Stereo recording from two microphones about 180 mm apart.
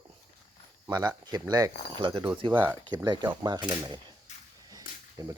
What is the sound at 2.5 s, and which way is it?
Speech, 10° right (ahead or behind).